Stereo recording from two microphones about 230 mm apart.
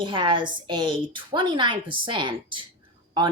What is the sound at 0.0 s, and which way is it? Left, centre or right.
A woman's voice, right.